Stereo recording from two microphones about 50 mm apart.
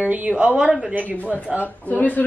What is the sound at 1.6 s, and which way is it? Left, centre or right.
Speech, left.